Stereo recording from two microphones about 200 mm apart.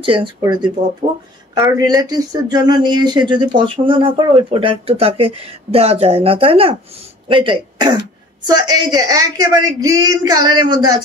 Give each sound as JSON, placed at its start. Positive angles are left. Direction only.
{"t": 0.0, "sound": "speech", "side_deg": -25}